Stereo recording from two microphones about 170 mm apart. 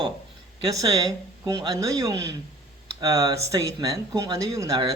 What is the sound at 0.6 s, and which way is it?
Speech, 20° right (ahead or behind).